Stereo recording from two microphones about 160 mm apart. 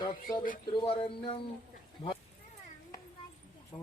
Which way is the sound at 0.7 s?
30° left (ahead or behind).